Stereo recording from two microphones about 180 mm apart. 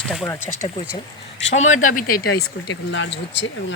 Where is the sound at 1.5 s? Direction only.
40° left (ahead or behind).